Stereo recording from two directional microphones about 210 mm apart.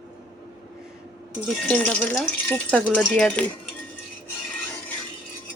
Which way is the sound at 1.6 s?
5° left (ahead or behind).